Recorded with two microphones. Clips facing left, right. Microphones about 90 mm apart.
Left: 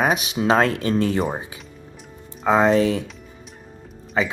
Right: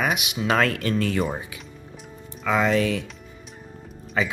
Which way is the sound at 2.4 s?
30° left (ahead or behind).